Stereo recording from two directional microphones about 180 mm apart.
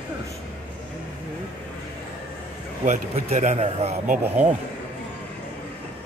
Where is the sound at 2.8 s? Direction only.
45° right (ahead or behind).